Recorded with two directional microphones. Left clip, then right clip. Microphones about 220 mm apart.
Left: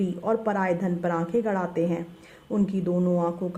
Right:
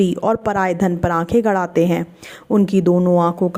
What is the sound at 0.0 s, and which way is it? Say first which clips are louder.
A woman's voice: right 9 dB; 40° right (ahead or behind).